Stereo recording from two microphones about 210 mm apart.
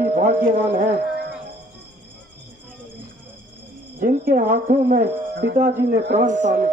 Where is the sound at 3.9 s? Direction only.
40° right (ahead or behind).